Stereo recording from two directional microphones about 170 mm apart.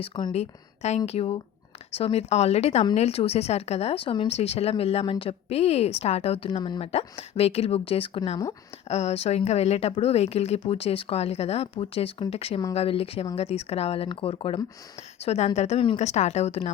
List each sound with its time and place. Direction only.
0.0 s speech: 30° left (ahead or behind)